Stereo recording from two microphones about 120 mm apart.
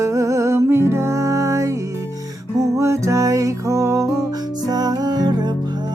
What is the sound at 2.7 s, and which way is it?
Music, 25° right (ahead or behind).